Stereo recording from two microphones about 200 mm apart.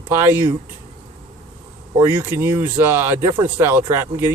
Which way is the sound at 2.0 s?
10° right (ahead or behind).